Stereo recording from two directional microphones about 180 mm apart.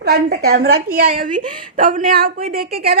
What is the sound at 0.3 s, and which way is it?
A woman's voice, 60° right (ahead or behind).